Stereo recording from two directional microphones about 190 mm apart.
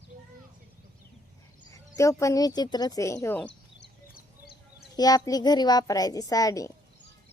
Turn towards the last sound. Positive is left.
turn(degrees=20)  # may be behind; listen again after turning